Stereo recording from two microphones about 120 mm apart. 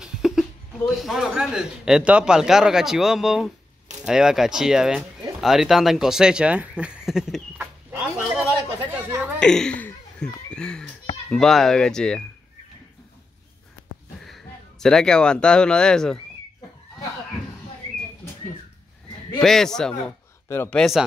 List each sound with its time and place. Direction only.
0.0 s speech: 5° right (ahead or behind)
7.5 s a sound: 10° right (ahead or behind)
8.7 s speech: 15° right (ahead or behind)
9.4 s speech: 5° left (ahead or behind)
10.5 s a sound: 5° left (ahead or behind)
11.2 s speech: 5° left (ahead or behind)
14.2 s speech: 5° left (ahead or behind)
19.4 s speech: 5° left (ahead or behind)
20.4 s speech: 20° left (ahead or behind)
20.7 s speech: centre (ahead or behind)